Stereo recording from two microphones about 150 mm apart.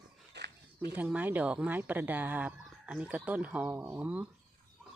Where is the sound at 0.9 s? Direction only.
10° right (ahead or behind).